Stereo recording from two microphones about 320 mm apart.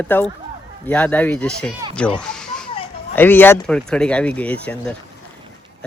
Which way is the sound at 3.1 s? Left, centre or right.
Centre.